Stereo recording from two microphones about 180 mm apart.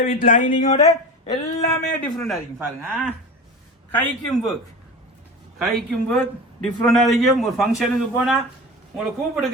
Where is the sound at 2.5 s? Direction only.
5° right (ahead or behind).